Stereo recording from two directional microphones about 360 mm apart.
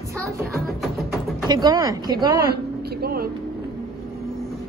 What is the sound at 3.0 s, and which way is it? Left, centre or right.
Vehicle, right.